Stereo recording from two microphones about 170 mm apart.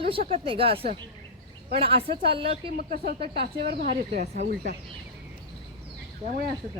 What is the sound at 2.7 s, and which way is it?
Speech, 60° right (ahead or behind).